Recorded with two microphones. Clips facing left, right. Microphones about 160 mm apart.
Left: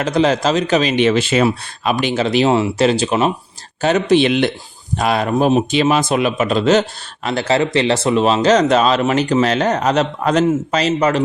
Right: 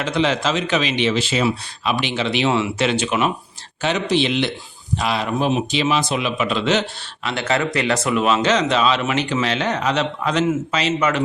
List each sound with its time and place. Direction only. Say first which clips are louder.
0.0 s speech: left 5 dB; 40° left (ahead or behind)